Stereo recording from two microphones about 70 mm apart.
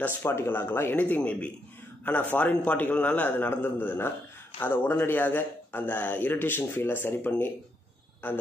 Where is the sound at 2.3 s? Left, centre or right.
Left.